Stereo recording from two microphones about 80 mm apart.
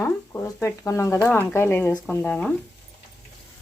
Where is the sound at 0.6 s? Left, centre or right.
Left.